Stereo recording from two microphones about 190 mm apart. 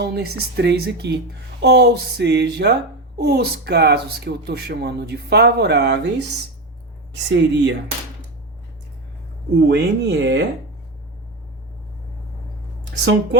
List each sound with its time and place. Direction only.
0.0 s speech: 55° right (ahead or behind)
9.6 s speech: 65° right (ahead or behind)